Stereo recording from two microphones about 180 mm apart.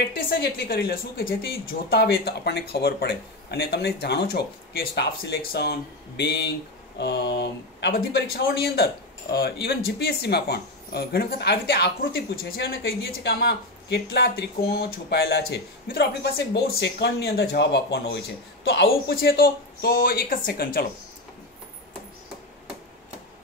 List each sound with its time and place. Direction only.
0.1 s speech: 55° left (ahead or behind)